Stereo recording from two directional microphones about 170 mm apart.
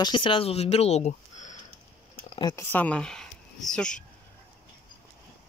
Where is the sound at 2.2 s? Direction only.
25° left (ahead or behind).